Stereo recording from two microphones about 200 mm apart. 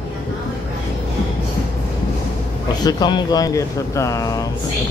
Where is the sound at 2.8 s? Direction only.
20° left (ahead or behind).